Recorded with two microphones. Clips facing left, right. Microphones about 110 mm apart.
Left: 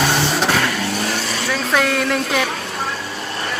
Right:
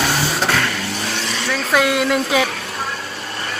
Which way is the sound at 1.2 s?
Centre (ahead or behind).